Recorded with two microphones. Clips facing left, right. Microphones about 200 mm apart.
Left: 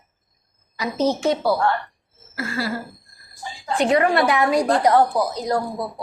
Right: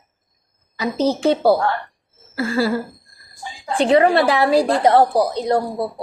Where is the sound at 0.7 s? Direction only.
30° right (ahead or behind).